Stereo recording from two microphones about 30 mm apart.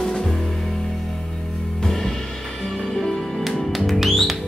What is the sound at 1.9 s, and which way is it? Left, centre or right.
Music, centre.